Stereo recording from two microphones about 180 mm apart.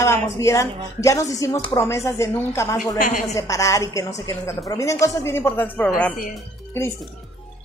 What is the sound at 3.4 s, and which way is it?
Speech, 15° left (ahead or behind).